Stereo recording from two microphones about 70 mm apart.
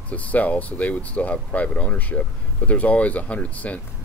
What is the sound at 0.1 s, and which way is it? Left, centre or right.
Speech, left.